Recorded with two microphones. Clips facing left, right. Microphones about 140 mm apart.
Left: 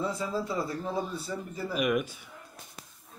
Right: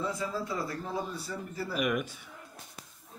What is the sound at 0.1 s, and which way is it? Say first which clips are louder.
A man's voice: left 2 dB; 25° left (ahead or behind).